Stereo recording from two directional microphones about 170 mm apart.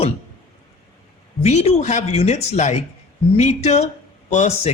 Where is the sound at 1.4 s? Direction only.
40° left (ahead or behind).